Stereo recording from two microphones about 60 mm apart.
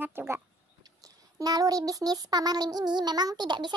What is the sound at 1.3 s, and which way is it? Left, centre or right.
Child singing, right.